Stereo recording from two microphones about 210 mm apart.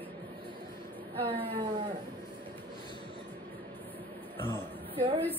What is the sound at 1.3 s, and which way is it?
Speech, 25° right (ahead or behind).